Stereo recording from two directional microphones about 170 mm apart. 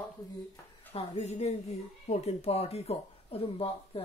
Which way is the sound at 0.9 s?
40° left (ahead or behind).